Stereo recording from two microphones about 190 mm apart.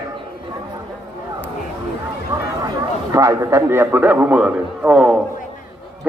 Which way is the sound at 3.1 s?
15° right (ahead or behind).